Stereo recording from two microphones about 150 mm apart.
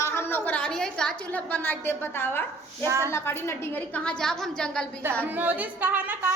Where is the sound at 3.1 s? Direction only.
15° left (ahead or behind).